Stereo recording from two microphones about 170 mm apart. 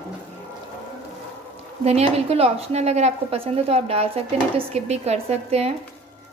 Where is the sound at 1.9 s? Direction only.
35° right (ahead or behind).